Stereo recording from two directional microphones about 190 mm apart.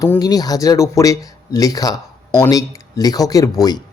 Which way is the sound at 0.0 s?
20° left (ahead or behind).